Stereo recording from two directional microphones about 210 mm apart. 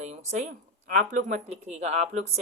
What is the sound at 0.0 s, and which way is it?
Speech, 35° right (ahead or behind).